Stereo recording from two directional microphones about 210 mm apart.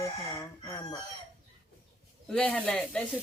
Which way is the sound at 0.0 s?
15° left (ahead or behind).